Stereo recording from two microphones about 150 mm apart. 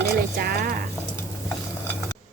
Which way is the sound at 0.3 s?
90° right.